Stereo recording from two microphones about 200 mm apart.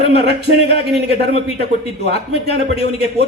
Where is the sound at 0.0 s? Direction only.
30° left (ahead or behind).